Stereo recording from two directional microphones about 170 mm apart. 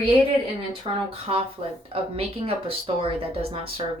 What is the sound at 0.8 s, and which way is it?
A woman's voice, 35° right (ahead or behind).